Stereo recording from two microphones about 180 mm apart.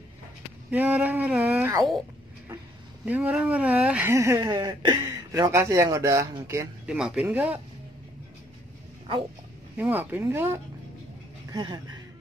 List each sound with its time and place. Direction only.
0.7 s speech: 10° right (ahead or behind)
3.1 s speech: 5° right (ahead or behind)
7.0 s speech: 5° right (ahead or behind)
9.8 s speech: 10° right (ahead or behind)
11.5 s speech: 25° right (ahead or behind)